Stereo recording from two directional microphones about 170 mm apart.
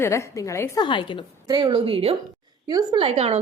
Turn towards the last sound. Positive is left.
turn(degrees=-35)  # may be behind; listen again after turning